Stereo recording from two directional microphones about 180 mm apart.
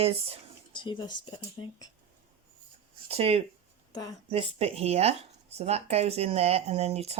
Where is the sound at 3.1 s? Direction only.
35° right (ahead or behind).